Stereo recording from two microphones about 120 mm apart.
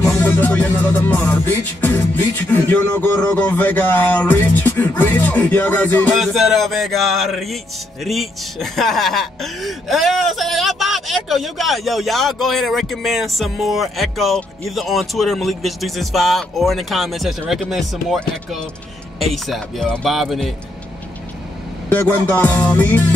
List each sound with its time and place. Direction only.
0.0 s music: 15° left (ahead or behind)
3.3 s music: 15° left (ahead or behind)
6.1 s speech: centre (ahead or behind)
21.8 s music: 20° left (ahead or behind)